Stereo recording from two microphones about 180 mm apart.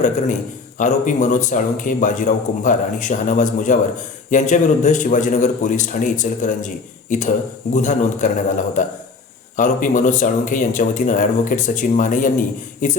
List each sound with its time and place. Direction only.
0.8 s speech: 45° left (ahead or behind)